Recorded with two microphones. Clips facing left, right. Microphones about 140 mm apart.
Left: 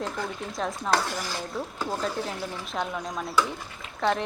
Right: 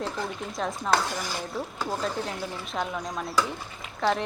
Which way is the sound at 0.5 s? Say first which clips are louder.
Even; centre (ahead or behind).